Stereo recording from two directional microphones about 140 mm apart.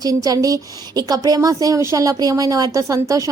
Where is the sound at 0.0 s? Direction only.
25° right (ahead or behind).